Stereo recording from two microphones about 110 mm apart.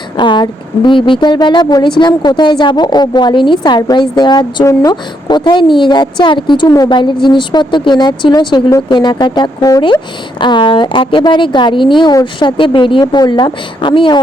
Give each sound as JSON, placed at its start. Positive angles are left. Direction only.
{"t": 0.2, "sound": "a woman's voice", "side_deg": 45}
{"t": 6.7, "sound": "speech", "side_deg": 30}
{"t": 6.9, "sound": "a woman's voice", "side_deg": 45}
{"t": 9.8, "sound": "a woman's voice", "side_deg": 45}